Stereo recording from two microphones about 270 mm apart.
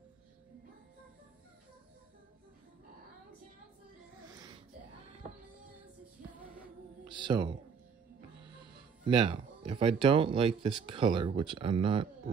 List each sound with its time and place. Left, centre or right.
4.3 s a sound: centre
7.1 s speech: centre
9.0 s speech: right